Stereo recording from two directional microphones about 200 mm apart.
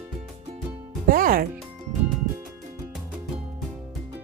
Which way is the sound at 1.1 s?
45° right (ahead or behind).